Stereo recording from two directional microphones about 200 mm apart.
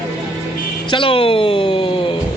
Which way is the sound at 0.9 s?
25° left (ahead or behind).